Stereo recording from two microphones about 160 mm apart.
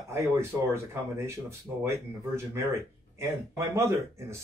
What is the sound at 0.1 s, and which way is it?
Speech, 15° right (ahead or behind).